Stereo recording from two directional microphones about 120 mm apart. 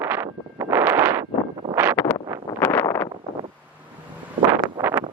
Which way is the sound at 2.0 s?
10° left (ahead or behind).